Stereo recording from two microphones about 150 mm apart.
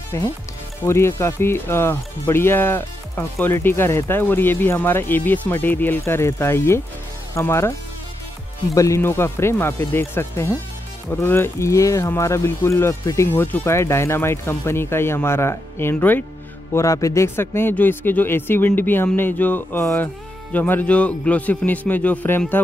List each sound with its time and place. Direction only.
0.8 s speech: 20° left (ahead or behind)
8.7 s speech: 20° left (ahead or behind)